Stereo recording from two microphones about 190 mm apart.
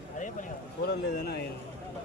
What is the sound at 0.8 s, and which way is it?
Speech, 55° left (ahead or behind).